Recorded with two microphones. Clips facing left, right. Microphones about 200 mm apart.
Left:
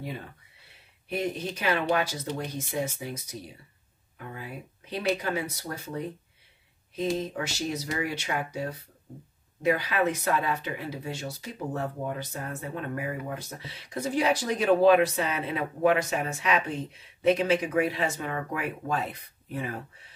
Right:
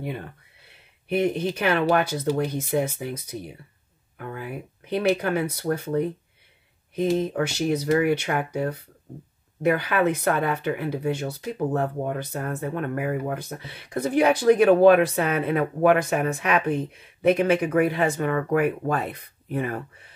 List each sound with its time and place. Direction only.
1.0 s speech: 60° right (ahead or behind)
7.2 s speech: 60° right (ahead or behind)